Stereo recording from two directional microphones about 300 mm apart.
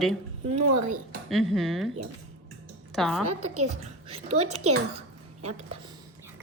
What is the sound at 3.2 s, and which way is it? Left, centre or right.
Speech, right.